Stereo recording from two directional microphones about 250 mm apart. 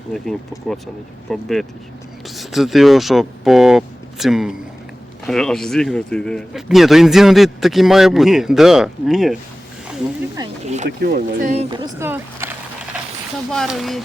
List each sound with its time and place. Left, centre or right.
1.3 s a man's voice: centre
10.8 s speech: right; by 12.5 s centre
13.5 s a man's voice: centre